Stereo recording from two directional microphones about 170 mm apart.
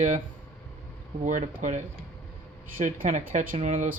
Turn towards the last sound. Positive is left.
turn(degrees=-45)  # may be behind; listen again after turning